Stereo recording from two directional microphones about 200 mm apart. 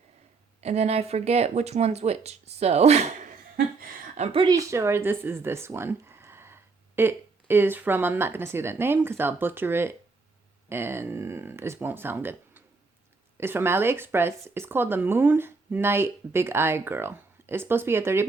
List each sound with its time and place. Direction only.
0.6 s speech: 30° right (ahead or behind)
4.2 s speech: 25° right (ahead or behind)